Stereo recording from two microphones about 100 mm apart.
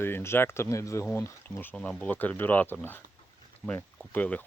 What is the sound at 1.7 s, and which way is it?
Speech, 10° left (ahead or behind).